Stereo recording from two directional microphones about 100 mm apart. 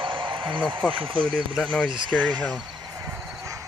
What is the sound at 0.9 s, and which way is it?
Speech, 65° right (ahead or behind).